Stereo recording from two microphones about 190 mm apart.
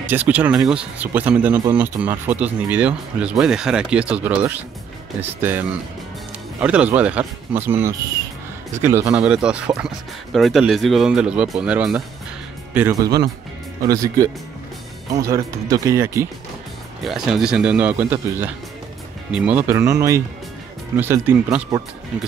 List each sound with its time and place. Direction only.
0.0 s speech: 10° right (ahead or behind)
17.0 s speech: centre (ahead or behind)